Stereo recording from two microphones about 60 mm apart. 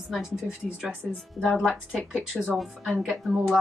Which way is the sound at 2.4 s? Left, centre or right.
Centre.